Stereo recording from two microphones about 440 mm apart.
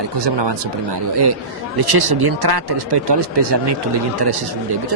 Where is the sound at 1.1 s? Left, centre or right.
Right.